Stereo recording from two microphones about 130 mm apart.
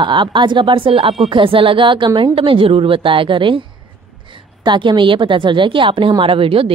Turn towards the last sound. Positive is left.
turn(degrees=-45)  # may be behind; listen again after turning